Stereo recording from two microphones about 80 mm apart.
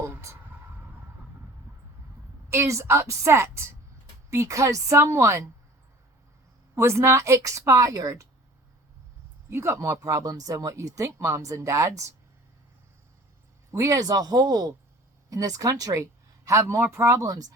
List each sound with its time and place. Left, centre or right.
0.0 s a sound: right
2.5 s speech: right
6.7 s speech: right
9.5 s speech: right
13.7 s speech: right